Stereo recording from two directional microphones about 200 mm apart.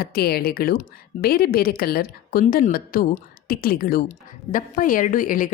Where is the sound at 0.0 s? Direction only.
50° left (ahead or behind).